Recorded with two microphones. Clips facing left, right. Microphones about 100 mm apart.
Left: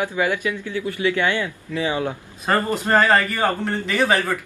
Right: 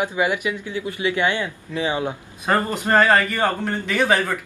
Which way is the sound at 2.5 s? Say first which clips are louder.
Even; centre (ahead or behind).